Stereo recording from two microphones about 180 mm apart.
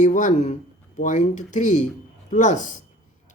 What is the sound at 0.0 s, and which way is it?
Speech, 45° left (ahead or behind).